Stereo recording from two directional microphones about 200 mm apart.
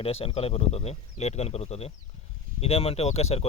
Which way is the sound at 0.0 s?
30° left (ahead or behind).